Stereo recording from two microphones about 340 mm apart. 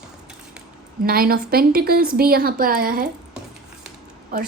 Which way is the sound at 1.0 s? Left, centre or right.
Right.